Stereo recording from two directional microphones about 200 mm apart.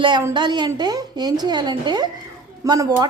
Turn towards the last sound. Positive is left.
turn(degrees=-20)  # may be behind; listen again after turning